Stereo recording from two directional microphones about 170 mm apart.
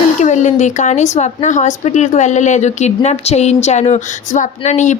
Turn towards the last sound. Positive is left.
turn(degrees=45)  # may be behind; listen again after turning